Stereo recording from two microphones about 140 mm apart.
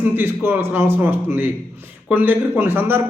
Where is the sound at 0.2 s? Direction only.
15° right (ahead or behind).